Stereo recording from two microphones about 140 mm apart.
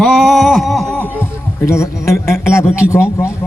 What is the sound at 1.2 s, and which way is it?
Music, 20° left (ahead or behind).